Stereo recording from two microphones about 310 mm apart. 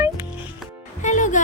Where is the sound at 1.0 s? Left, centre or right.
Left.